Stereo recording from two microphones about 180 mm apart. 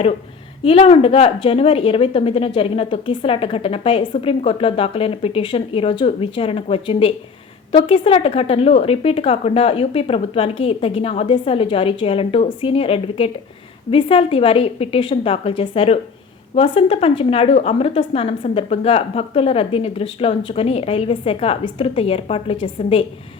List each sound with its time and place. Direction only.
0.6 s a woman's voice: 30° left (ahead or behind)